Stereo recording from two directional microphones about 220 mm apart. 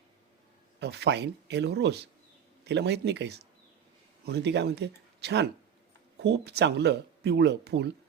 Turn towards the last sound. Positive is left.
turn(degrees=-50)  # may be behind; listen again after turning